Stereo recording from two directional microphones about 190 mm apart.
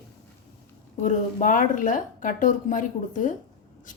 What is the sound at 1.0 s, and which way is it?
A woman's voice, 45° left (ahead or behind).